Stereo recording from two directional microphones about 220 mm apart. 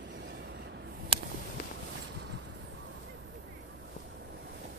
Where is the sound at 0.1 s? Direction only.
55° right (ahead or behind).